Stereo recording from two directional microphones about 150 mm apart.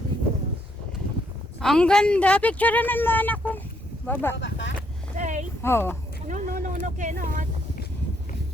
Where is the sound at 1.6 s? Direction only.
5° left (ahead or behind).